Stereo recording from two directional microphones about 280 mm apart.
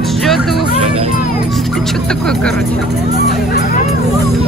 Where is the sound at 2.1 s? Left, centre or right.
Centre.